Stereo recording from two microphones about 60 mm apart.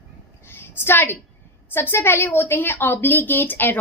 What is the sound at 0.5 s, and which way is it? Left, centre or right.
A woman's voice, left.